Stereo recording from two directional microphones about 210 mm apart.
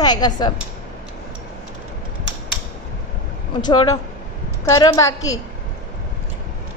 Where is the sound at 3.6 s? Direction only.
20° left (ahead or behind).